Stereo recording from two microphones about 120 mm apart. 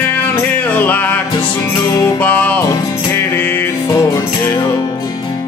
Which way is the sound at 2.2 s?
15° left (ahead or behind).